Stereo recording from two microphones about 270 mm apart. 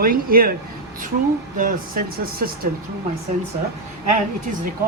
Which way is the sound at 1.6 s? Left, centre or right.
Right.